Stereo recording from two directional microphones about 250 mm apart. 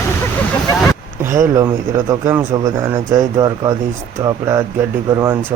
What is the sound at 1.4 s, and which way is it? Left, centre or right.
Speech, centre.